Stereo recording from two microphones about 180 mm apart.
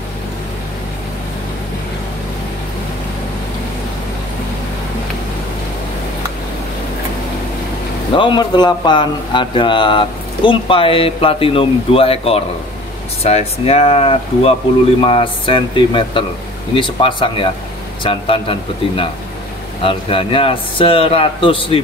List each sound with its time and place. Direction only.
8.2 s speech: 25° left (ahead or behind)